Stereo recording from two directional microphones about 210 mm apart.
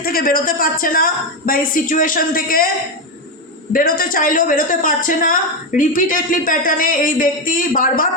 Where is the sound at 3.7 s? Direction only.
45° left (ahead or behind).